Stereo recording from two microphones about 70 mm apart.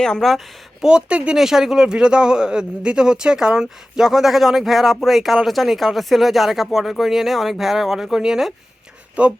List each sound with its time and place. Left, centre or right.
0.0 s speech: centre
0.9 s speech: centre
9.2 s speech: centre